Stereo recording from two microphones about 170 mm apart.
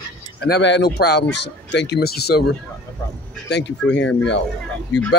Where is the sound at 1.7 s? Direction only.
90° left; by 2.5 s 70° left (ahead or behind).